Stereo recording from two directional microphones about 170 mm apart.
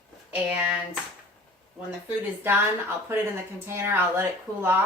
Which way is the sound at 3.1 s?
15° right (ahead or behind).